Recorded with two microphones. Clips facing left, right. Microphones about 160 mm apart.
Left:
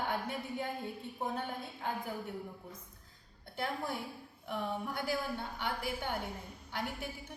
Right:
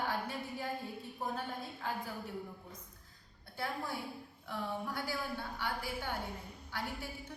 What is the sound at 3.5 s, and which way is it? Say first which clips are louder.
A woman's voice: left 2 dB; 20° left (ahead or behind).